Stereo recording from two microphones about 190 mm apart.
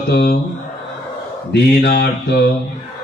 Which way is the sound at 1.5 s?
60° left (ahead or behind).